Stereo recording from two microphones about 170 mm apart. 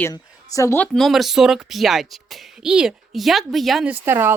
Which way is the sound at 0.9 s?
Centre (ahead or behind).